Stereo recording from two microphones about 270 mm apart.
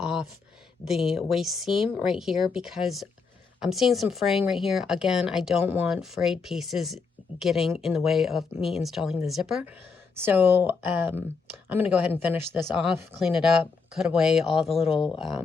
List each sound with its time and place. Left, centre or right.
0.0 s a sound: centre
0.9 s speech: centre
14.7 s speech: left